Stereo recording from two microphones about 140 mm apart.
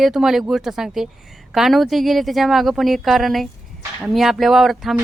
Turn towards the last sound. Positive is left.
turn(degrees=0)  # may be behind; listen again after turning